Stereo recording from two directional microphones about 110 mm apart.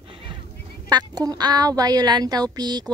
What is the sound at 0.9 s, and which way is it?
Speech, 35° right (ahead or behind).